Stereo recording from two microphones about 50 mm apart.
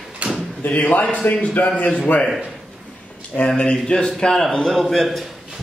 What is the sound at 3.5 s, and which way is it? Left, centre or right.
A man's voice, centre.